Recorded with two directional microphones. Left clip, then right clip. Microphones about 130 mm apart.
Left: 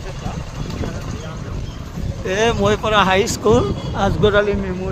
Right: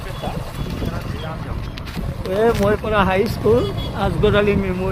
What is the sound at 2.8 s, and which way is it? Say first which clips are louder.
Speech: left 3 dB; 70° left (ahead or behind).